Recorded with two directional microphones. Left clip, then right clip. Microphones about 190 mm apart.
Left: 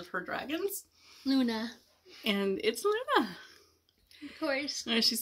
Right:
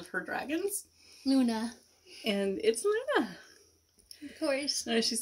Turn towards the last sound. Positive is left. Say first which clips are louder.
# left 1 dB
turn(degrees=15)  # may be behind; listen again after turning